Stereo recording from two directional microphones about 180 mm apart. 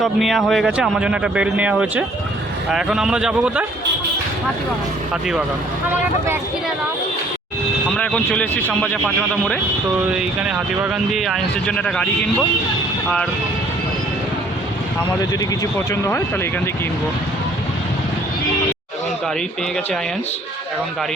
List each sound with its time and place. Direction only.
0.0 s speech: centre (ahead or behind)
7.9 s speech: 5° left (ahead or behind)
15.2 s speech: 20° left (ahead or behind)